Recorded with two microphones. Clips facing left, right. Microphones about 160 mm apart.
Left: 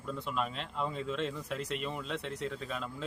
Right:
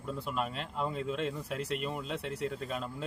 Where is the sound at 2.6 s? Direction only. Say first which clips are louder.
Right 2 dB; 50° right (ahead or behind).